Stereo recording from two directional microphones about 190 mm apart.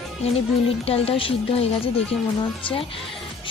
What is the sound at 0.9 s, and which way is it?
Speech, 30° left (ahead or behind).